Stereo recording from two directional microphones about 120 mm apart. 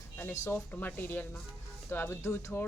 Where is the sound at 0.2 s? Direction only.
20° left (ahead or behind).